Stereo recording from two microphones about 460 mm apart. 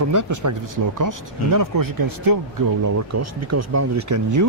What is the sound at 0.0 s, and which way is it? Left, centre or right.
Speech, right.